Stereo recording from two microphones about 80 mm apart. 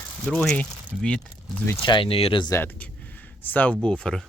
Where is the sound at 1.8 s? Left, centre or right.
Left.